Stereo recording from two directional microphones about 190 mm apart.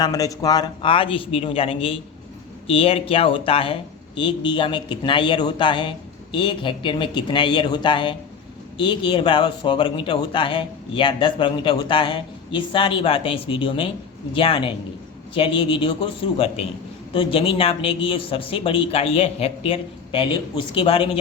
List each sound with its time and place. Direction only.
0.0 s speech: 20° left (ahead or behind)
17.2 s speech: 30° left (ahead or behind)